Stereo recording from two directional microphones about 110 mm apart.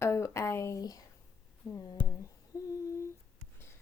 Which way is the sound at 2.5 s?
30° left (ahead or behind).